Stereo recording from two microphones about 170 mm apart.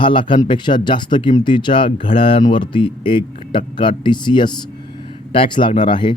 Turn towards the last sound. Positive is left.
turn(degrees=30)  # may be behind; listen again after turning